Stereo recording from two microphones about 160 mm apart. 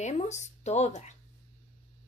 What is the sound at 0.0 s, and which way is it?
A woman's voice, 45° left (ahead or behind).